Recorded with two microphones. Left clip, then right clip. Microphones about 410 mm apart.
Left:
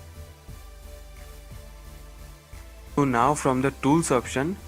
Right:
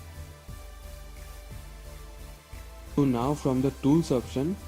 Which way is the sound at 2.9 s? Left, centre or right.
Left.